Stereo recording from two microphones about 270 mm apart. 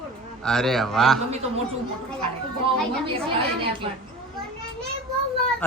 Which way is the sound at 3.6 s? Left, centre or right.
Centre.